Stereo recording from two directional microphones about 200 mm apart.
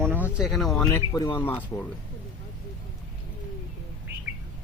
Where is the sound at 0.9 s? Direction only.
20° left (ahead or behind).